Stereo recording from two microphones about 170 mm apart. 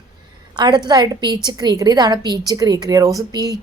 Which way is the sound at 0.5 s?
25° right (ahead or behind).